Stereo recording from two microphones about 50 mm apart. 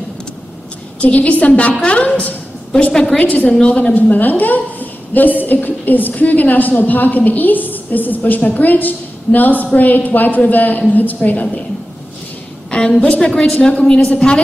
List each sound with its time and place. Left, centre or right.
1.0 s a woman's voice: left
3.4 s a woman's voice: centre
3.9 s a woman's voice: left
12.7 s a woman's voice: left